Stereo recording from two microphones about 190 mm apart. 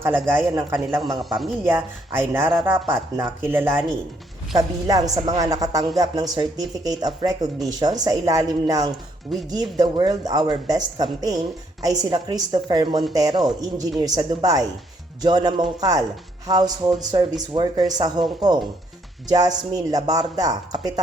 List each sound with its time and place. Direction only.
0.0 s a man's voice: 10° right (ahead or behind)
1.2 s speech: centre (ahead or behind)
1.6 s a man's voice: 10° right (ahead or behind)